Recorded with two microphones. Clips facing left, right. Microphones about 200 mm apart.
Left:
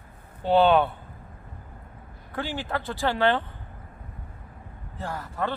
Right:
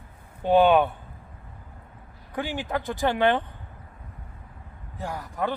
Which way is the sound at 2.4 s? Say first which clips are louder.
Right 1 dB; 15° right (ahead or behind).